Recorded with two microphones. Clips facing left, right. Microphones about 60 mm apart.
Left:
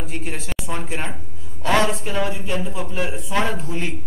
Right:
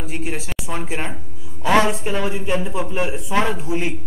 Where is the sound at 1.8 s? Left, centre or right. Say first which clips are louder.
Right 3 dB; centre.